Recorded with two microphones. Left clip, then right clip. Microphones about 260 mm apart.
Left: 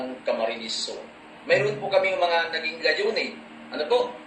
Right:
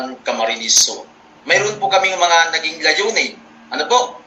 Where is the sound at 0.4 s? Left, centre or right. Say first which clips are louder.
Right 8 dB; right.